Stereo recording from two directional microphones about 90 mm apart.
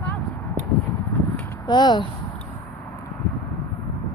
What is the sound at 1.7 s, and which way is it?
Speech, 55° left (ahead or behind).